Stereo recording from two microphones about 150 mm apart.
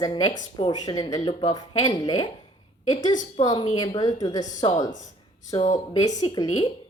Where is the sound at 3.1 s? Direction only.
55° left (ahead or behind).